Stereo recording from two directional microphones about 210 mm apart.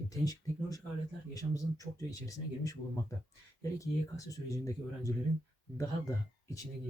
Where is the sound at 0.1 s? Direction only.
15° left (ahead or behind).